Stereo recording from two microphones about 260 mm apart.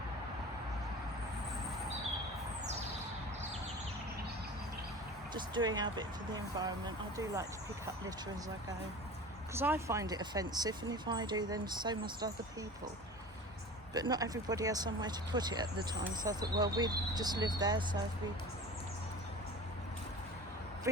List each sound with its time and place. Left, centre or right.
5.3 s speech: centre
9.6 s speech: centre
13.9 s speech: centre
20.9 s speech: centre